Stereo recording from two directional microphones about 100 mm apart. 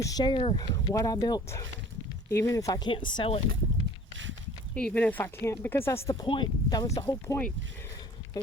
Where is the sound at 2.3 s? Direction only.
30° left (ahead or behind).